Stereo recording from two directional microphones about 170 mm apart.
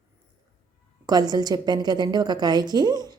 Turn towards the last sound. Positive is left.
turn(degrees=-25)  # may be behind; listen again after turning